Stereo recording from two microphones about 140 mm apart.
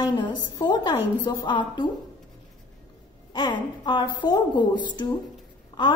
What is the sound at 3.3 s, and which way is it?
A woman's voice, 30° left (ahead or behind).